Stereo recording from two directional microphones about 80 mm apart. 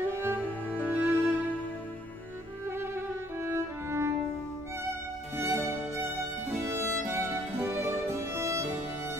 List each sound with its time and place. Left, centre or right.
0.3 s music: left
1.0 s music: right
2.7 s music: right
5.4 s music: right
7.5 s music: right